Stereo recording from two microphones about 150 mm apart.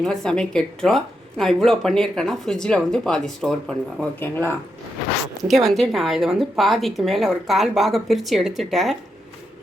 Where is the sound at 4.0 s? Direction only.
15° left (ahead or behind).